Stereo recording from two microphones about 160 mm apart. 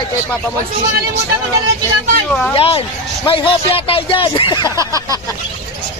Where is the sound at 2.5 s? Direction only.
35° left (ahead or behind).